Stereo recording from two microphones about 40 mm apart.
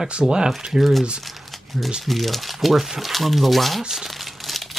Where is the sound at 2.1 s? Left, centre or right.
Centre.